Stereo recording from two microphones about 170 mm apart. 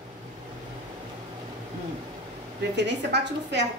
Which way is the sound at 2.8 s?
90° right.